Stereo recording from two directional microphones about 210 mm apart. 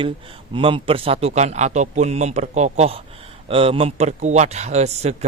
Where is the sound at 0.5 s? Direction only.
25° right (ahead or behind).